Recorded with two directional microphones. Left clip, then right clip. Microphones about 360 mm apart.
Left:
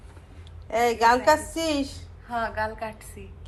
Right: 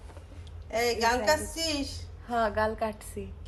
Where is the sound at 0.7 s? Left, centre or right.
Centre.